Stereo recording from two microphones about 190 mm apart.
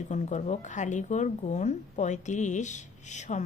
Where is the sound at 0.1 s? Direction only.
40° left (ahead or behind).